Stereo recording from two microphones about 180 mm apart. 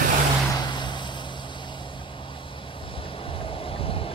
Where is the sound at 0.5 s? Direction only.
25° left (ahead or behind).